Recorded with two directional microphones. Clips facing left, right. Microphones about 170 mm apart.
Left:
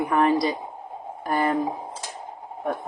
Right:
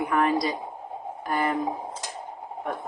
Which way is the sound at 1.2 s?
30° left (ahead or behind).